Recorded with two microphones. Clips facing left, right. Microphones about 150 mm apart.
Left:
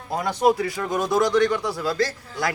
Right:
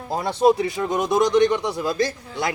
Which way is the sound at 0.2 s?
25° right (ahead or behind).